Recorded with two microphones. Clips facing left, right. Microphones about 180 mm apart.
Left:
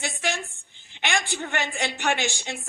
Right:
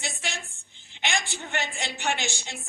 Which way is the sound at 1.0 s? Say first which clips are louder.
Left 3 dB; 65° left (ahead or behind).